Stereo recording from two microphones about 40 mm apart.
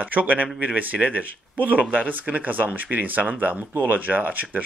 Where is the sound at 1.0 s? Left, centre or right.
Right.